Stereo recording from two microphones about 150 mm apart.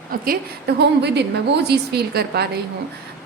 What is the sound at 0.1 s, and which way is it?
Speech, 70° right (ahead or behind).